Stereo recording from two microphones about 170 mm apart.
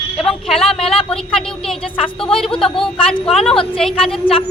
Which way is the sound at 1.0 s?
5° left (ahead or behind).